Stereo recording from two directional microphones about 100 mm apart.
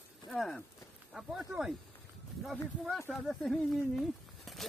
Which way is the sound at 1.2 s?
5° right (ahead or behind).